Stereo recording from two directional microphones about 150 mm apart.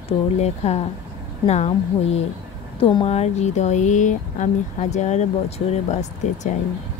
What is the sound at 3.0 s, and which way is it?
Speech, 45° left (ahead or behind).